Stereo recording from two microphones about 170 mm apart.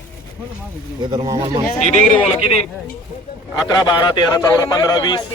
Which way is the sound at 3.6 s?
25° left (ahead or behind).